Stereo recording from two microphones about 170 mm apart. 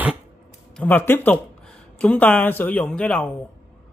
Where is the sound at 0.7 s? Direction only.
10° left (ahead or behind).